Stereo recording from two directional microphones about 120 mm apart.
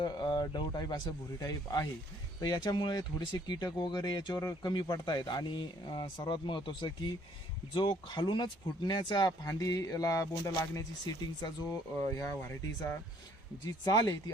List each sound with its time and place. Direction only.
0.0 s speech: 40° left (ahead or behind); by 12.5 s 25° left (ahead or behind)
13.9 s speech: 35° left (ahead or behind)